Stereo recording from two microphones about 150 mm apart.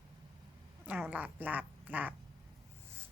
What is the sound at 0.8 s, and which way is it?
A woman's voice, 10° right (ahead or behind).